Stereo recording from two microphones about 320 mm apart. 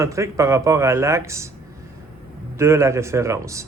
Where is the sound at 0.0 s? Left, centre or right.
Centre.